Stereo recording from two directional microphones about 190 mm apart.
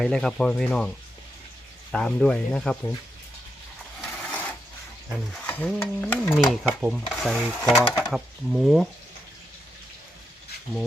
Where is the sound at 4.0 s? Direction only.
5° left (ahead or behind).